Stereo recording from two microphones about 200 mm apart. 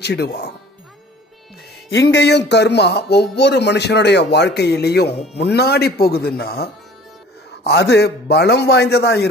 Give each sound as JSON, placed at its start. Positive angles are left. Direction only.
{"t": 0.0, "sound": "speech", "side_deg": 55}
{"t": 2.1, "sound": "speech", "side_deg": 60}